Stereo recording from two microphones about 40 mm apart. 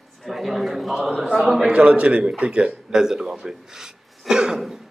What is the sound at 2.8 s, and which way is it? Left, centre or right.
Speech, centre.